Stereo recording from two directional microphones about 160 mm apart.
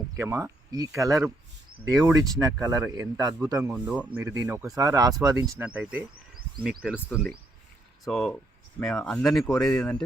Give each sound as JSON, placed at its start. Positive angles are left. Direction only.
{"t": 0.2, "sound": "speech", "side_deg": -15}
{"t": 3.6, "sound": "speech", "side_deg": -5}
{"t": 5.6, "sound": "speech", "side_deg": -10}
{"t": 8.0, "sound": "speech", "side_deg": 5}